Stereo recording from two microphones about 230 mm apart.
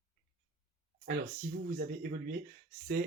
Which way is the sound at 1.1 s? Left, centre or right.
Right.